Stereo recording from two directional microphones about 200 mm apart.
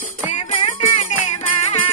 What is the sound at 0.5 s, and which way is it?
Music, 25° left (ahead or behind).